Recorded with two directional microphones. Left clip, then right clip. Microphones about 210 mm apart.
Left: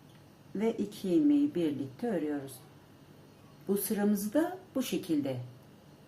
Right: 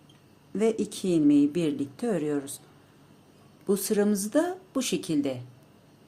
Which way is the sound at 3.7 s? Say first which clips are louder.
Right 6 dB; 45° right (ahead or behind).